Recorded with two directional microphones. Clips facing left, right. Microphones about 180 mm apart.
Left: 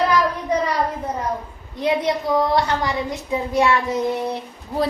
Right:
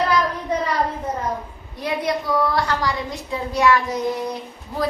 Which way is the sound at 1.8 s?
20° left (ahead or behind).